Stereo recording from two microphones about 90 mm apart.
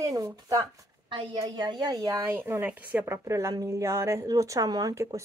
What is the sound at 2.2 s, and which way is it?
A woman's voice, 30° right (ahead or behind).